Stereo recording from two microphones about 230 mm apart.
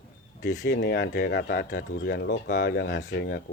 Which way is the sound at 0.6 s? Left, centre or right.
Left.